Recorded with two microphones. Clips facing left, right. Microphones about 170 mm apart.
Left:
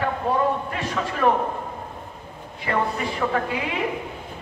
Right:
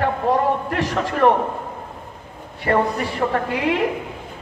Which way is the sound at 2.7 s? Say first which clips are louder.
Right 5 dB; 45° right (ahead or behind).